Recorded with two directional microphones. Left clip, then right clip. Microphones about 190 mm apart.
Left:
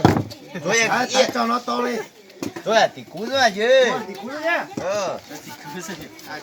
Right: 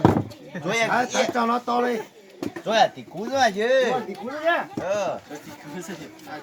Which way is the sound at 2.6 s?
10° right (ahead or behind).